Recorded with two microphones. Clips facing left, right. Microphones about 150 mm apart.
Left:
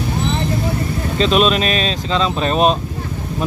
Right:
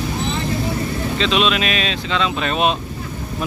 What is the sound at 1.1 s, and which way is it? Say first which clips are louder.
Speech: left 5 dB; 40° left (ahead or behind).